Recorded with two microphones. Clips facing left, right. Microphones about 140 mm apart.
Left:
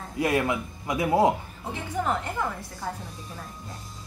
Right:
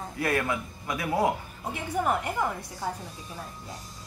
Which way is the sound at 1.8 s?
10° right (ahead or behind).